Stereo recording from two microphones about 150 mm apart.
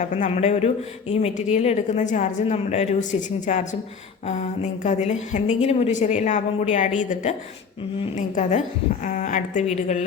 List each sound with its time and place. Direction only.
0.0 s a woman's voice: 50° left (ahead or behind)
8.4 s a woman's voice: 55° left (ahead or behind)